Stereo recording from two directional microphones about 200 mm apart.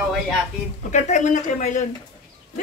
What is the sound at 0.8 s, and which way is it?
Speech, 40° left (ahead or behind).